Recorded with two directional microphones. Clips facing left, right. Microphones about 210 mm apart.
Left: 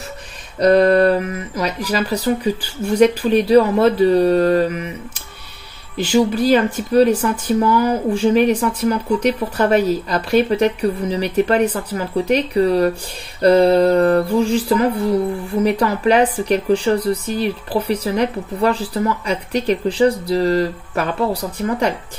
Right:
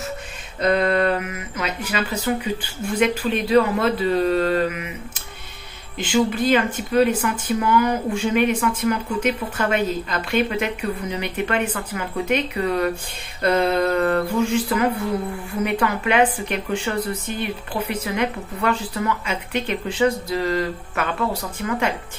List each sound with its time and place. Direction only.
0.6 s speech: 40° left (ahead or behind)